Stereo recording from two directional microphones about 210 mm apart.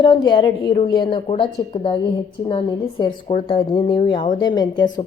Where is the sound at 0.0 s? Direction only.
20° left (ahead or behind).